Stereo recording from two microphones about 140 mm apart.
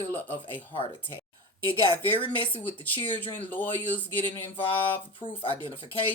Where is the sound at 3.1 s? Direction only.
10° left (ahead or behind).